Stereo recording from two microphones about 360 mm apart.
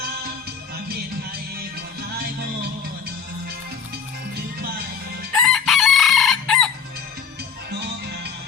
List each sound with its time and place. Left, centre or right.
5.4 s chicken: centre
7.7 s music: right